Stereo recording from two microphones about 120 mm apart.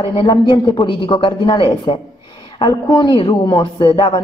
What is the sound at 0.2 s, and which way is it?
A woman's voice, 40° left (ahead or behind).